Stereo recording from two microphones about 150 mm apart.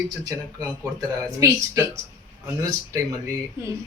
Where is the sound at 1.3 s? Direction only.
20° right (ahead or behind).